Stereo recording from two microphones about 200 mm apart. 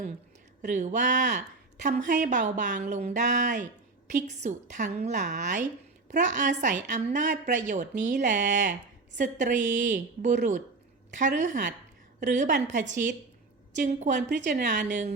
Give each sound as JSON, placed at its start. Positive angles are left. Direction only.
{"t": 0.6, "sound": "a woman's voice", "side_deg": -40}